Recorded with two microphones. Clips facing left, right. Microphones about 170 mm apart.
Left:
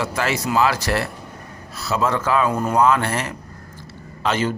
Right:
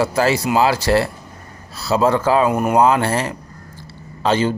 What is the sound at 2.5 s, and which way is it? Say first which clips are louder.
Speech: right 4 dB; 20° right (ahead or behind).